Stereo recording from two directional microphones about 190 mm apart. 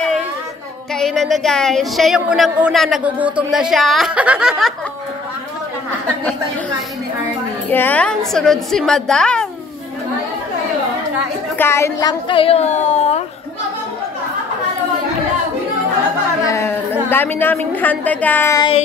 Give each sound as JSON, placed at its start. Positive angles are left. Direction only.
{"t": 0.9, "sound": "a woman's voice", "side_deg": 0}
{"t": 7.7, "sound": "a woman's voice", "side_deg": 10}
{"t": 11.5, "sound": "a woman's voice", "side_deg": 15}
{"t": 16.4, "sound": "a woman's voice", "side_deg": 15}